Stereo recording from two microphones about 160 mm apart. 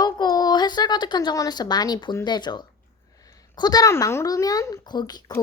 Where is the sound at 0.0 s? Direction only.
25° left (ahead or behind).